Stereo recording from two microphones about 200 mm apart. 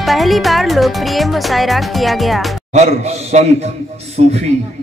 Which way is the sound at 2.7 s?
35° right (ahead or behind).